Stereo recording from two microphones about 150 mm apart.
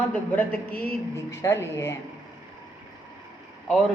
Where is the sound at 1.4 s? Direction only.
20° left (ahead or behind).